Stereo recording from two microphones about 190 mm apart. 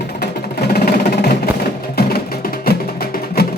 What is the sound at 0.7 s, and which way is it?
Music, 55° left (ahead or behind).